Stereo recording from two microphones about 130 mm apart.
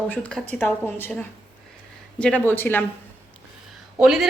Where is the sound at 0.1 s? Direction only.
5° left (ahead or behind).